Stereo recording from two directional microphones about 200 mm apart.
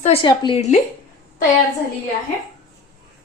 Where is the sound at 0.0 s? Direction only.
30° left (ahead or behind).